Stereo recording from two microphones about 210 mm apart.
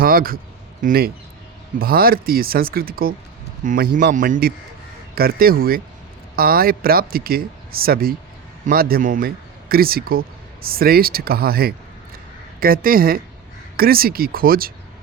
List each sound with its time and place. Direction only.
0.0 s a man's voice: 45° right (ahead or behind)